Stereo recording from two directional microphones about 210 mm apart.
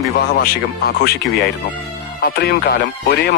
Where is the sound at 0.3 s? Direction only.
45° left (ahead or behind).